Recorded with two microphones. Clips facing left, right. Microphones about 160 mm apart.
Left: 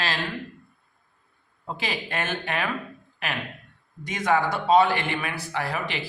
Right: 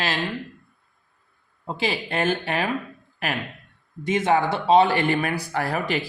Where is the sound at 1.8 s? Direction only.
30° right (ahead or behind).